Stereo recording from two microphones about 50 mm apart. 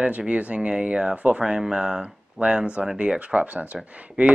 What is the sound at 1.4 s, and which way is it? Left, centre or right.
Speech, centre.